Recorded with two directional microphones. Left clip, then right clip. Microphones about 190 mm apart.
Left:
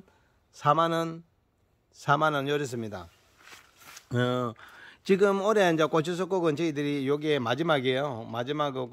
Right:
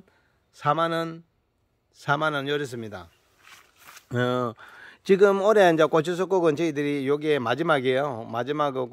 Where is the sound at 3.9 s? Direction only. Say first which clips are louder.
Right 3 dB; 20° right (ahead or behind).